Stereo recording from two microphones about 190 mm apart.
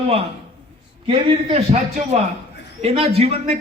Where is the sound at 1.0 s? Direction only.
25° right (ahead or behind).